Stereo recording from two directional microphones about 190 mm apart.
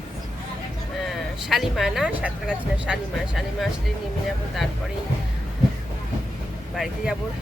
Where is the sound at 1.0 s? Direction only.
Centre (ahead or behind).